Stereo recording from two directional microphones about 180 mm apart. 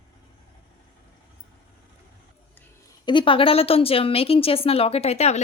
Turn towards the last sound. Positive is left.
turn(degrees=35)  # may be behind; listen again after turning